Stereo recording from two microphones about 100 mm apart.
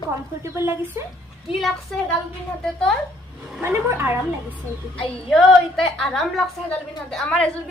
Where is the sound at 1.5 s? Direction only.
Centre (ahead or behind).